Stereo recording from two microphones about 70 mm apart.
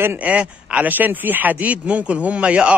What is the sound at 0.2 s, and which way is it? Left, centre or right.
A man's voice, centre.